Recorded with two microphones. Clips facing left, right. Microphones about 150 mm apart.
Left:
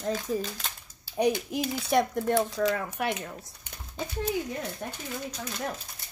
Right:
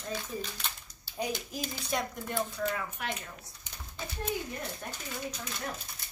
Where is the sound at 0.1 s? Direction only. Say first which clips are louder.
Left 7 dB; 45° left (ahead or behind).